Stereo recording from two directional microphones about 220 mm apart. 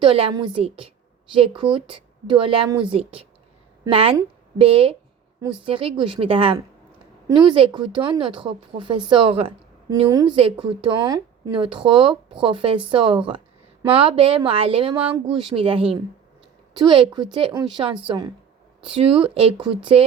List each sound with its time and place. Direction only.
0.0 s a woman's voice: 25° right (ahead or behind)